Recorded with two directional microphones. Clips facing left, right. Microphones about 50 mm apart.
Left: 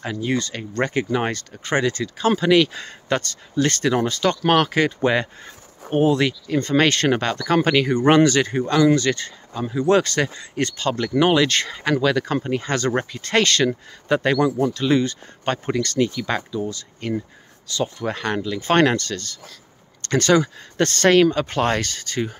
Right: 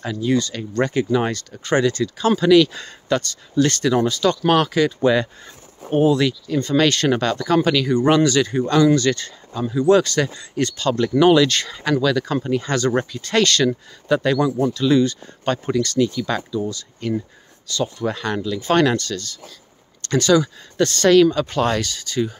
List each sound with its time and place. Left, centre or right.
0.0 s speech: left
9.8 s speech: left